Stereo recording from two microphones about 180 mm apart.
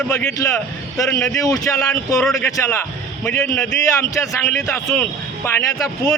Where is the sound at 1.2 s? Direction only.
20° left (ahead or behind).